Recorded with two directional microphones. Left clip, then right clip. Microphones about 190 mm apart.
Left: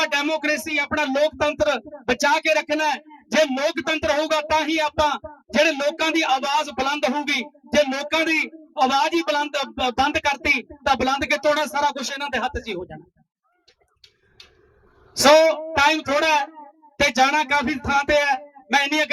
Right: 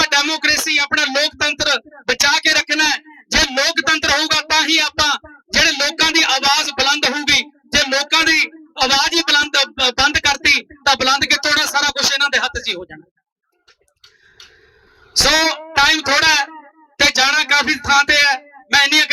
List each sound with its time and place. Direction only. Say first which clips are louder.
0.1 s speech: right 6 dB; 55° left (ahead or behind)
15.1 s speech: even; 55° left (ahead or behind)